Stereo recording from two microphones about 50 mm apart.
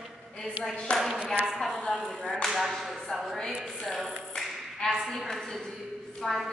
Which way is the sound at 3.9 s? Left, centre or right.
Centre.